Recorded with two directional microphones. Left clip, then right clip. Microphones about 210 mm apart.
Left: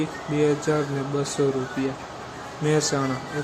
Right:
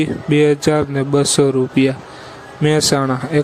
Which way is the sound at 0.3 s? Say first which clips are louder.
Right 8 dB; 45° right (ahead or behind).